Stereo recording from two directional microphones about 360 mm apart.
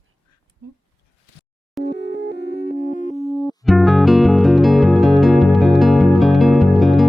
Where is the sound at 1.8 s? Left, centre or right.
Left.